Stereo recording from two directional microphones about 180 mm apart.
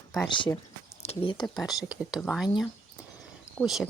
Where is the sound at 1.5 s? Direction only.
Centre (ahead or behind).